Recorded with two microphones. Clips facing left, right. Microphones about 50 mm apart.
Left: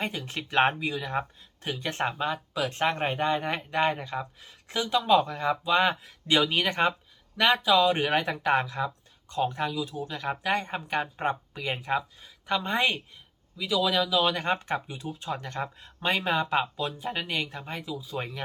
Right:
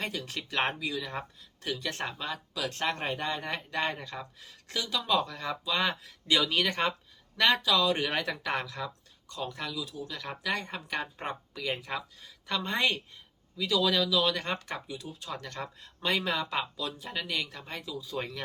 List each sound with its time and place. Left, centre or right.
0.0 s speech: left; by 7.6 s centre
7.6 s speech: left
14.2 s speech: left